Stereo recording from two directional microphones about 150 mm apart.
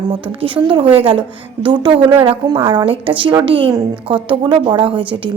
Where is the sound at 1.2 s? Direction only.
30° right (ahead or behind).